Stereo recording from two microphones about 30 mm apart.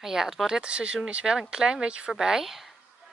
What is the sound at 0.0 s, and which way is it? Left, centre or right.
Speech, centre.